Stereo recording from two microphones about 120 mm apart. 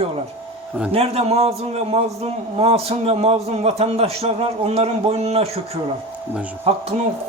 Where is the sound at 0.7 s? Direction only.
10° right (ahead or behind).